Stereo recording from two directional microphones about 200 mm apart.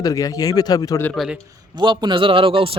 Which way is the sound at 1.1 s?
Centre (ahead or behind).